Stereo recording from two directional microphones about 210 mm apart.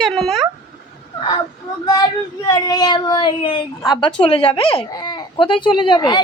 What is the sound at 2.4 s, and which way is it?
Speech, 20° left (ahead or behind).